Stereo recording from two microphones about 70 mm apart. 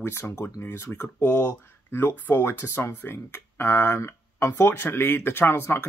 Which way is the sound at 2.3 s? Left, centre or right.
Left.